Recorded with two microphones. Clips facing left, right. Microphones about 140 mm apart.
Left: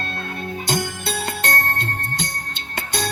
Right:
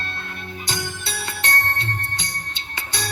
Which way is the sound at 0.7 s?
50° left (ahead or behind).